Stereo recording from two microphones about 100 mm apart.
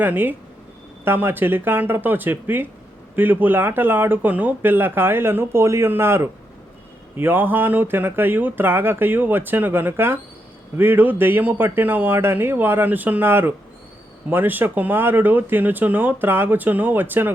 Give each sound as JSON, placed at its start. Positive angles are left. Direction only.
{"t": 0.0, "sound": "speech", "side_deg": -20}